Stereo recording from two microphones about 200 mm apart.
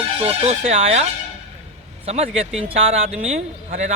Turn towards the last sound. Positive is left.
turn(degrees=-35)  # may be behind; listen again after turning